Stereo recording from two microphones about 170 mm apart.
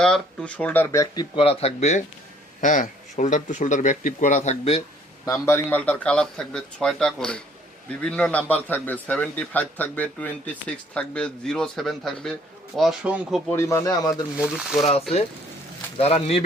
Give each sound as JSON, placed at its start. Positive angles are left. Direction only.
{"t": 0.0, "sound": "a man's voice", "side_deg": 5}
{"t": 1.1, "sound": "speech", "side_deg": 25}
{"t": 1.5, "sound": "speech", "side_deg": 40}
{"t": 5.2, "sound": "a man's voice", "side_deg": 15}
{"t": 13.5, "sound": "a man's voice", "side_deg": 15}
{"t": 14.3, "sound": "speech", "side_deg": -5}
{"t": 16.0, "sound": "speech", "side_deg": 35}